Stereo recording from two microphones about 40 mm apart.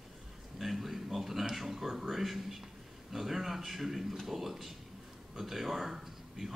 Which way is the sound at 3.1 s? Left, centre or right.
Centre.